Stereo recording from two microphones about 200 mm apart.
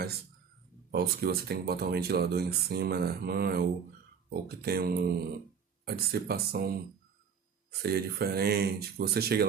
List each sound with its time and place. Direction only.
0.9 s speech: 50° right (ahead or behind)
7.8 s speech: 50° right (ahead or behind)